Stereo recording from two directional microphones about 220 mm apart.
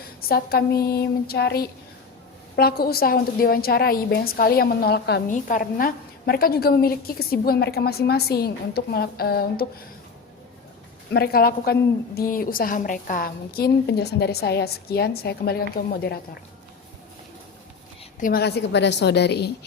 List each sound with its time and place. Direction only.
0.2 s a woman's voice: 45° left (ahead or behind)
11.1 s a woman's voice: 45° left (ahead or behind)
18.2 s a woman's voice: 45° left (ahead or behind)